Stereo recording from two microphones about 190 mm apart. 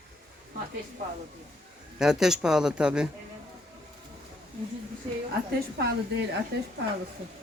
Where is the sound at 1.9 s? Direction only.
5° right (ahead or behind).